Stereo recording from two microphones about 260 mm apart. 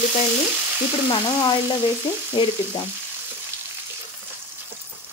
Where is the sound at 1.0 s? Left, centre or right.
Centre.